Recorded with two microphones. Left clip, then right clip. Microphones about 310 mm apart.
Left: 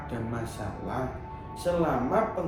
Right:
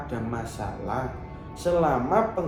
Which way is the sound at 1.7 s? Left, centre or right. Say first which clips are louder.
Right 4 dB; centre.